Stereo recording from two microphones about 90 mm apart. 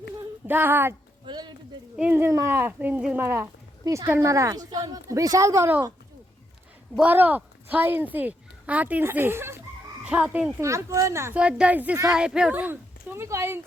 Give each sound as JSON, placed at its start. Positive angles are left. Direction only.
{"t": 0.4, "sound": "a sound", "side_deg": -25}
{"t": 1.3, "sound": "speech", "side_deg": -55}
{"t": 2.0, "sound": "a sound", "side_deg": -20}
{"t": 3.8, "sound": "a woman's voice", "side_deg": -30}
{"t": 7.0, "sound": "speech", "side_deg": -20}
{"t": 10.1, "sound": "speech", "side_deg": -15}
{"t": 10.6, "sound": "a woman's voice", "side_deg": -35}
{"t": 11.3, "sound": "speech", "side_deg": -10}
{"t": 13.2, "sound": "a sound", "side_deg": -30}